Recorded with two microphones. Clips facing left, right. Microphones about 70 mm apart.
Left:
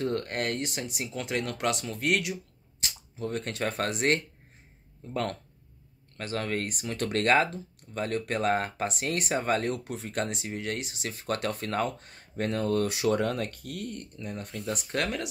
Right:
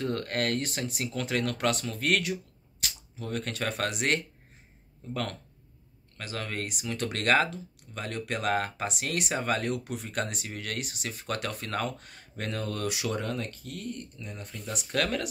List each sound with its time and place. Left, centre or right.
0.0 s speech: left
2.8 s speech: left
13.1 s speech: left
14.9 s speech: centre